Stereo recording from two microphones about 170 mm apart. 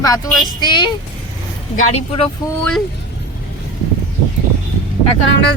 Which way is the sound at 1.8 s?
40° left (ahead or behind).